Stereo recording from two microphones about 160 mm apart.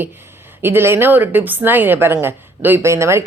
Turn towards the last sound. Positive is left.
turn(degrees=-15)  # may be behind; listen again after turning